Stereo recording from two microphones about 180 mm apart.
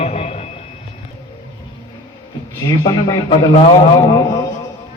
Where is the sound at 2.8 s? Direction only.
25° left (ahead or behind).